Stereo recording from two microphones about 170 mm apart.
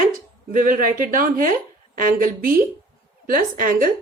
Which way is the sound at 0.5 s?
50° right (ahead or behind).